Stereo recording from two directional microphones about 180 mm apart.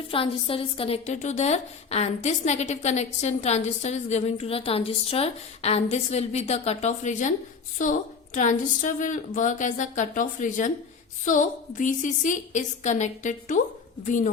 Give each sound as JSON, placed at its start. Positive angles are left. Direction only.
{"t": 0.1, "sound": "a woman's voice", "side_deg": 30}